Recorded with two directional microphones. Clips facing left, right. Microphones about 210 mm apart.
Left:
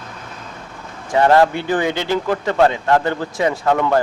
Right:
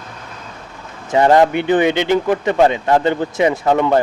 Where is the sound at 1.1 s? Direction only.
20° right (ahead or behind).